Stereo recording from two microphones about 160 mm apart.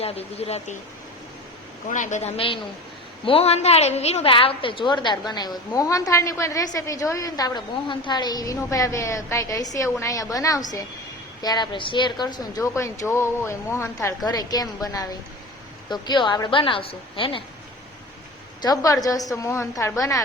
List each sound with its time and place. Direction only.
0.0 s a woman's voice: 40° left (ahead or behind)
1.9 s a man's voice: 50° left (ahead or behind); by 17.4 s 35° left (ahead or behind)
18.6 s a woman's voice: 25° left (ahead or behind)